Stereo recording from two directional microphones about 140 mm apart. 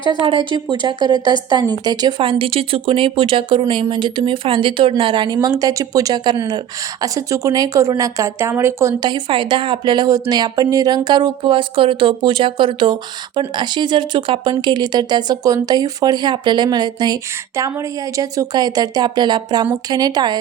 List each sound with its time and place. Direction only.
0.2 s a woman's voice: 35° right (ahead or behind)